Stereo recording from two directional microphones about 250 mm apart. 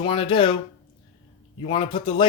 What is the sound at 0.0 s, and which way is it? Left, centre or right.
Speech, left.